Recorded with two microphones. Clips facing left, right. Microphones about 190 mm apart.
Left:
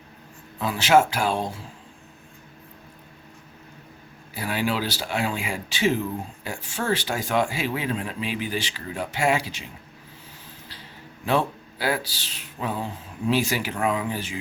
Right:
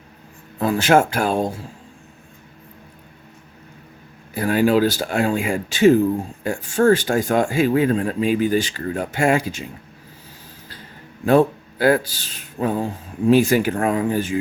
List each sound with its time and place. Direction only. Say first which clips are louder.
0.6 s speech: right 3 dB; 50° right (ahead or behind)
4.4 s speech: right 10 dB; 45° right (ahead or behind)
11.3 s speech: right 9 dB; 50° right (ahead or behind)